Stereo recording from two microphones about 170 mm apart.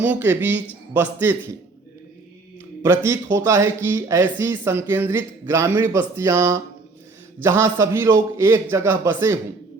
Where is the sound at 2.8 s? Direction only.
15° right (ahead or behind).